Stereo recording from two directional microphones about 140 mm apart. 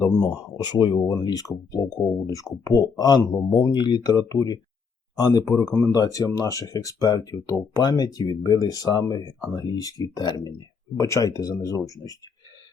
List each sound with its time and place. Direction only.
0.0 s speech: 30° left (ahead or behind)